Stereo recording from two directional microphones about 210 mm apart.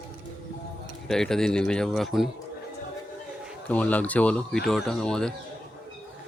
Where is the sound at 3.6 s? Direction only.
5° left (ahead or behind).